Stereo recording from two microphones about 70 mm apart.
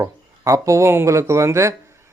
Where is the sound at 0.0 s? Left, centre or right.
Right.